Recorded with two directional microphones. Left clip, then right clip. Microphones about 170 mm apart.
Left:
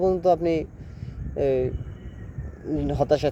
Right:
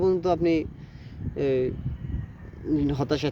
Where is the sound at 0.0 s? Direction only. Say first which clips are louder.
Left 2 dB; 20° right (ahead or behind).